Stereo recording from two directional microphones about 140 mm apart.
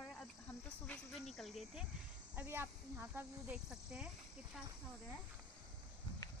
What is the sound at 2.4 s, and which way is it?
Speech, 15° right (ahead or behind).